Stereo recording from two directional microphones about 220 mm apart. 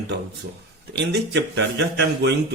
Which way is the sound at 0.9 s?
50° right (ahead or behind).